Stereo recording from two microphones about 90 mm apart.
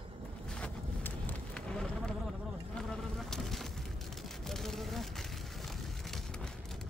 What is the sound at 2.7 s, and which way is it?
Insect, 5° left (ahead or behind).